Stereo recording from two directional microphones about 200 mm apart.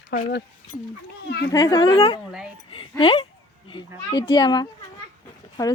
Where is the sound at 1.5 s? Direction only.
20° left (ahead or behind).